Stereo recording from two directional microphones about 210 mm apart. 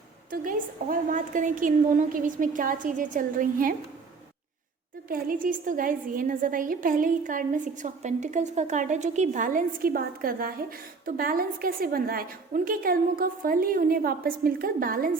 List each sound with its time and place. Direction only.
0.3 s a woman's voice: 40° right (ahead or behind)
5.0 s a woman's voice: 40° right (ahead or behind)